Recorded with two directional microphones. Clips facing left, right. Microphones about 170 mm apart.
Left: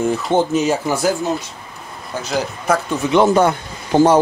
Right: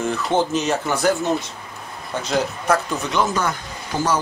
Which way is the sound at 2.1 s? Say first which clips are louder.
Even; 5° left (ahead or behind).